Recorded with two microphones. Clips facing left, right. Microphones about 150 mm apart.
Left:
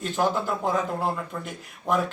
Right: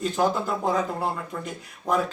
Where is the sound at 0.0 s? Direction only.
Centre (ahead or behind).